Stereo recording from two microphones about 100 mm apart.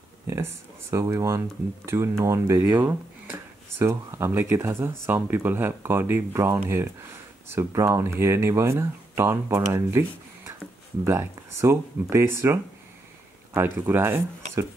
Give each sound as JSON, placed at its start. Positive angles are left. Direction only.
{"t": 0.3, "sound": "speech", "side_deg": -30}
{"t": 13.6, "sound": "speech", "side_deg": -25}